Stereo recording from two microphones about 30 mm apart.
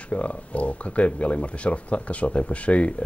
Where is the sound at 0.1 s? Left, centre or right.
Left.